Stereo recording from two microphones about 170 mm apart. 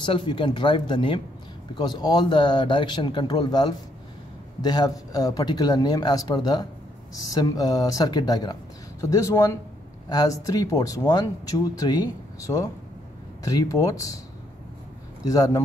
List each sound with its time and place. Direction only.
0.0 s speech: 30° left (ahead or behind)
15.2 s speech: 20° left (ahead or behind)